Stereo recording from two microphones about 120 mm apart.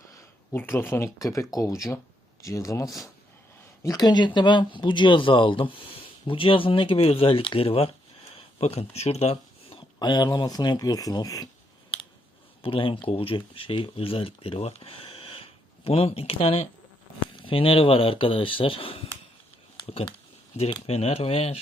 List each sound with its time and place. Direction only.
0.1 s speech: 20° left (ahead or behind); by 7.9 s 50° left (ahead or behind)
8.3 s a sound: 50° left (ahead or behind)
10.0 s speech: 35° left (ahead or behind)
12.6 s speech: 50° left (ahead or behind)
20.8 s speech: 60° left (ahead or behind)